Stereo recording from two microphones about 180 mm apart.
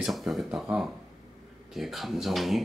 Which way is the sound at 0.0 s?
Centre (ahead or behind).